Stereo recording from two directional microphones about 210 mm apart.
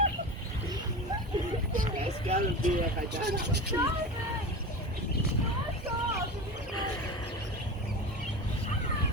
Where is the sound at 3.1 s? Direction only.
50° right (ahead or behind).